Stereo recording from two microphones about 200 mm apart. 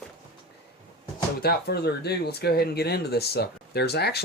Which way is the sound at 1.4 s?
50° left (ahead or behind).